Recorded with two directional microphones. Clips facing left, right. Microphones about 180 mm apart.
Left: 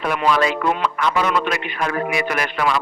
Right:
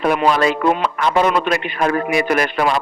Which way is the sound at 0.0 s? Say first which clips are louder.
Right 3 dB; 35° right (ahead or behind).